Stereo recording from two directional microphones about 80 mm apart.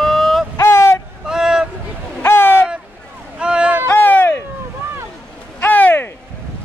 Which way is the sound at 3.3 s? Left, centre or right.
Centre.